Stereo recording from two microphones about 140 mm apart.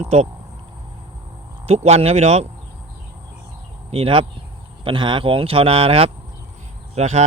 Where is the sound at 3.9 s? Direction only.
40° right (ahead or behind).